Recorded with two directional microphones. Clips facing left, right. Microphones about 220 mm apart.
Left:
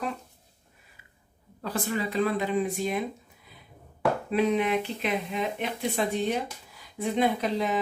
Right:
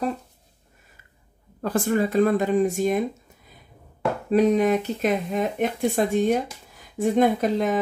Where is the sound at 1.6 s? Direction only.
50° right (ahead or behind).